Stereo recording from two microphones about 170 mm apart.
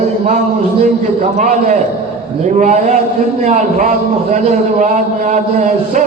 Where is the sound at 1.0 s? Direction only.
45° right (ahead or behind).